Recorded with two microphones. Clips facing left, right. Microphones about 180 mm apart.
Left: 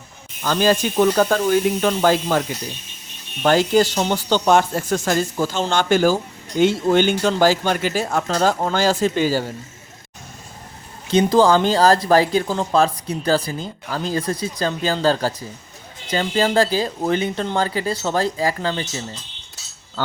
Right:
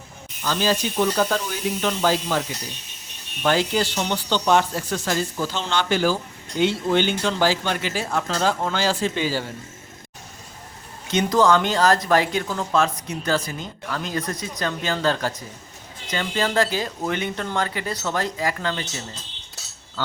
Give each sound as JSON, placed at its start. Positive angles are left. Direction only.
{"t": 0.4, "sound": "speech", "side_deg": 50}
{"t": 3.4, "sound": "speech", "side_deg": 45}
{"t": 11.1, "sound": "speech", "side_deg": 30}